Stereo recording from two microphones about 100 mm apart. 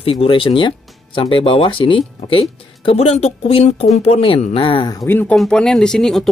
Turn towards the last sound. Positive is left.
turn(degrees=5)  # may be behind; listen again after turning